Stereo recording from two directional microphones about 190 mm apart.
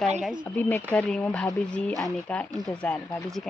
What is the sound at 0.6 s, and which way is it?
Speech, 15° left (ahead or behind).